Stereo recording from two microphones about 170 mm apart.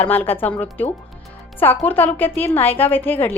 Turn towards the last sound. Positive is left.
turn(degrees=10)  # may be behind; listen again after turning